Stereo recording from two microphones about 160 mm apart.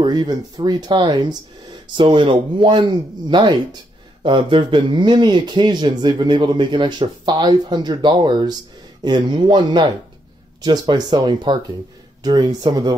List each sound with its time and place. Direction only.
0.0 s speech: 25° right (ahead or behind)